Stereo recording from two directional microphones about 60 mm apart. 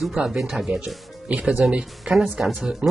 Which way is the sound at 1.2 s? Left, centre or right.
Centre.